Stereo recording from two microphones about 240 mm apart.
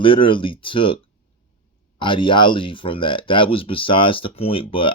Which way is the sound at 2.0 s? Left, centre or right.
Centre.